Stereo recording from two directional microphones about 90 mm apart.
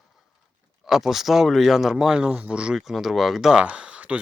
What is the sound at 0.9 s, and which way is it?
Speech, 5° right (ahead or behind).